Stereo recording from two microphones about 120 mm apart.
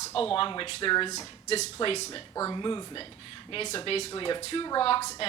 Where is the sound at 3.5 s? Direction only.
55° left (ahead or behind).